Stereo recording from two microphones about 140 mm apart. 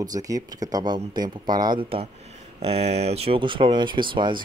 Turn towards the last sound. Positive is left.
turn(degrees=-35)  # may be behind; listen again after turning